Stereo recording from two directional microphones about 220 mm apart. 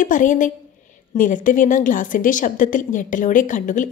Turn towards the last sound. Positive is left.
turn(degrees=35)  # may be behind; listen again after turning